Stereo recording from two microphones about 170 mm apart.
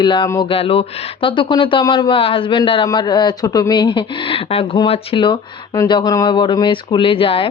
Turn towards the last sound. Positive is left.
turn(degrees=30)  # may be behind; listen again after turning